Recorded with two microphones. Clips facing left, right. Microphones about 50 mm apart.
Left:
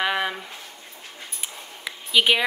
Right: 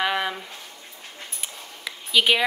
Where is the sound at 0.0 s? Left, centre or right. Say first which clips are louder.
Even; centre.